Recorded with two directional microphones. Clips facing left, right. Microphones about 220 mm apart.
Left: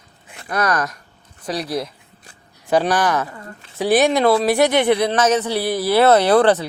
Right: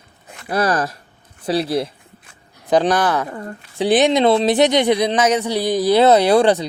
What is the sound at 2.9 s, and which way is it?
Speech, 10° left (ahead or behind).